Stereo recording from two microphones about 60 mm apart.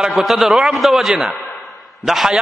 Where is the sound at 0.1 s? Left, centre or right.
Centre.